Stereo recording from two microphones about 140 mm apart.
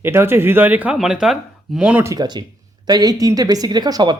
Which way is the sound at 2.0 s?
30° right (ahead or behind).